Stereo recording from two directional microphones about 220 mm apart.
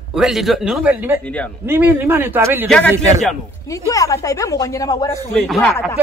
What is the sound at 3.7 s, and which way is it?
A woman's voice, 15° left (ahead or behind).